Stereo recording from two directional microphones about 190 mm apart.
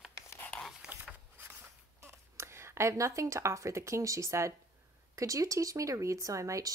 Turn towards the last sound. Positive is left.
turn(degrees=-15)  # may be behind; listen again after turning